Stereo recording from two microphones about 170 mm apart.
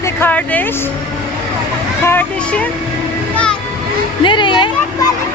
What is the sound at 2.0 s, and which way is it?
Speech, 10° left (ahead or behind).